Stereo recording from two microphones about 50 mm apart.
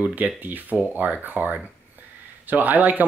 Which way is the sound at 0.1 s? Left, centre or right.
Right.